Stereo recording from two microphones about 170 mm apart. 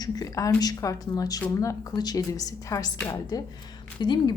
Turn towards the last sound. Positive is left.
turn(degrees=25)  # may be behind; listen again after turning